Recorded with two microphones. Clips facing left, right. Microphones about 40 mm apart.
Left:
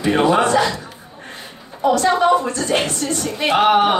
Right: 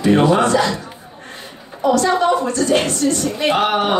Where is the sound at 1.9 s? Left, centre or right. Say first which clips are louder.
Even; centre.